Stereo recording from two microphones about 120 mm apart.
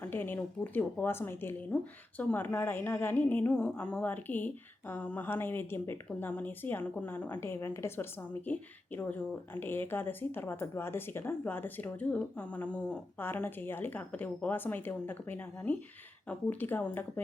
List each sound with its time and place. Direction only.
0.0 s speech: 15° left (ahead or behind)